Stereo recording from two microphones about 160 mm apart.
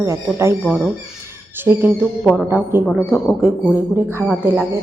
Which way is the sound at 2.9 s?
Centre (ahead or behind).